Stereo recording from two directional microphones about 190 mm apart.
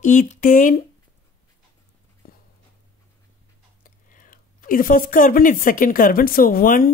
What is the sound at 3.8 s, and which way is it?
Speech, 45° left (ahead or behind).